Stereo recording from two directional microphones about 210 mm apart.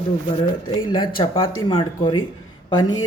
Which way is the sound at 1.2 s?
25° left (ahead or behind).